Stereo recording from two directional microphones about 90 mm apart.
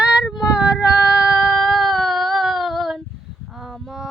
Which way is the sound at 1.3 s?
5° left (ahead or behind).